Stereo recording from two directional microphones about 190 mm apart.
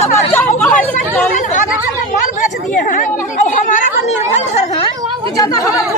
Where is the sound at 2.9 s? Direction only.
40° left (ahead or behind).